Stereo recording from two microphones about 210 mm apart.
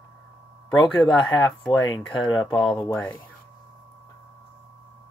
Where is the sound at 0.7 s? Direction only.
Centre (ahead or behind).